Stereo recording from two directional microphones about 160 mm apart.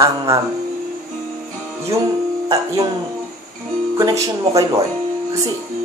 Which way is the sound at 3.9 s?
20° right (ahead or behind).